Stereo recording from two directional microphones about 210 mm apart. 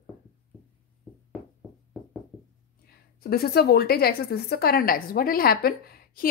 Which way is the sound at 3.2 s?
45° left (ahead or behind).